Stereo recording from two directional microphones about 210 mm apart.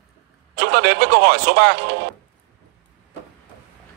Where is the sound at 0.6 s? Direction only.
50° right (ahead or behind).